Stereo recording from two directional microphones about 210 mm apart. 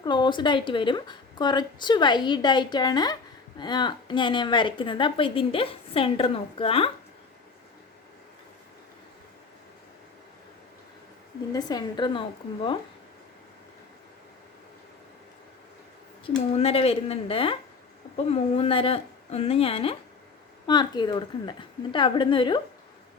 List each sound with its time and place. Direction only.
0.0 s a woman's voice: 20° left (ahead or behind)
11.5 s a woman's voice: 20° left (ahead or behind)
16.6 s a woman's voice: 30° left (ahead or behind)